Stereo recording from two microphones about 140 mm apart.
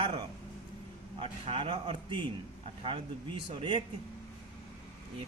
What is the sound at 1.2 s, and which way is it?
A man's voice, 40° right (ahead or behind).